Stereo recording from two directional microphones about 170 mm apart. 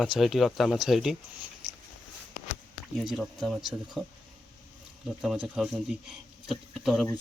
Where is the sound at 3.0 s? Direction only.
Centre (ahead or behind).